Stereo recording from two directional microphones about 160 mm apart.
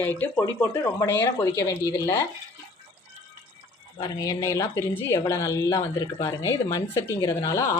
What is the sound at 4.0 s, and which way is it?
Speech, 25° left (ahead or behind).